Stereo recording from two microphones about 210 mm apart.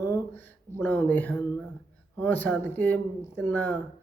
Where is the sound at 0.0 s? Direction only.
10° left (ahead or behind).